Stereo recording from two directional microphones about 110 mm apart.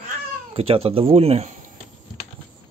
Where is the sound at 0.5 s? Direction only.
60° right (ahead or behind).